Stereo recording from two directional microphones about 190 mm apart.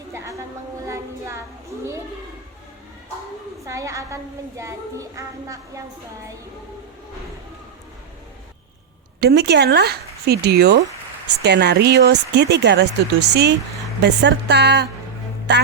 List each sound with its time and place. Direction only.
0.1 s a sound: 15° right (ahead or behind)
3.7 s a woman's voice: 15° right (ahead or behind)
9.2 s speech: 60° right (ahead or behind)